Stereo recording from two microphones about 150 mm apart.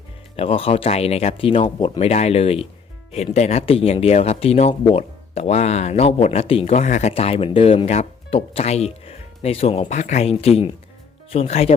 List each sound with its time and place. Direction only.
0.3 s speech: 40° left (ahead or behind)
7.1 s speech: 40° left (ahead or behind)